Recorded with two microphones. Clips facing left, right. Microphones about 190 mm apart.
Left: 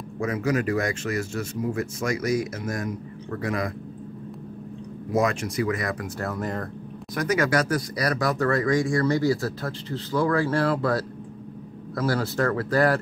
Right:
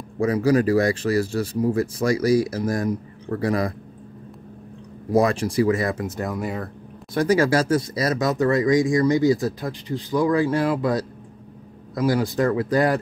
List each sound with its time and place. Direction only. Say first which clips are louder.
0.2 s speech: right 6 dB; 35° right (ahead or behind)
5.1 s speech: right 5 dB; 35° right (ahead or behind); by 6.7 s 10° right (ahead or behind)
7.2 s speech: right 4 dB; 30° right (ahead or behind)